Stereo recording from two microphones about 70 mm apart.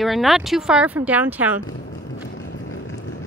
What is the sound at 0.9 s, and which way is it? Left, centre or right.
Speech, right.